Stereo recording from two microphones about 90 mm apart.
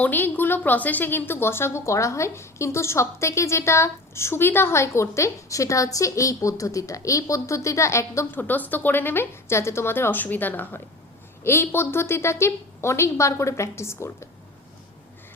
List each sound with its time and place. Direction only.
0.0 s a woman's voice: 20° left (ahead or behind)